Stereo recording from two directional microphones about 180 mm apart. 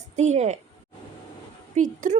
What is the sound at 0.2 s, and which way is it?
Speech, 40° right (ahead or behind).